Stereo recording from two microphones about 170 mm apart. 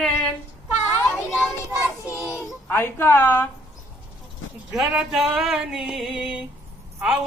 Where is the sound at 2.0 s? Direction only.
15° left (ahead or behind).